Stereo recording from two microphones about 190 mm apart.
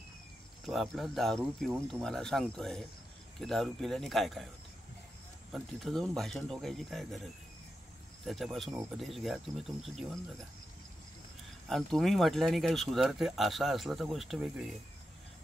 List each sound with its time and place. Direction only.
0.7 s speech: centre (ahead or behind)
5.5 s speech: centre (ahead or behind)
8.3 s speech: centre (ahead or behind)
11.6 s speech: centre (ahead or behind)